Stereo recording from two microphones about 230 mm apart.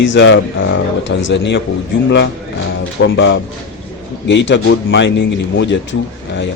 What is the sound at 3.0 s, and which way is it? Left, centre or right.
A man's voice, left.